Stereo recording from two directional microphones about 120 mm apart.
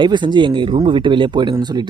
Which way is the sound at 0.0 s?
40° right (ahead or behind).